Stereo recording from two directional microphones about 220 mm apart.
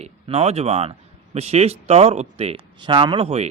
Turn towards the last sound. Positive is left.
turn(degrees=-25)  # may be behind; listen again after turning